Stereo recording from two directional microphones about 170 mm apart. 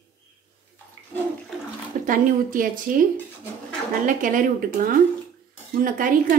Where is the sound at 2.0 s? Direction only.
50° right (ahead or behind).